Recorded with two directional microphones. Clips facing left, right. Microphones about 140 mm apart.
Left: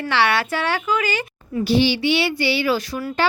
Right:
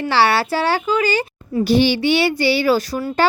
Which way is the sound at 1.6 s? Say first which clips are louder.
Right 2 dB; 50° right (ahead or behind).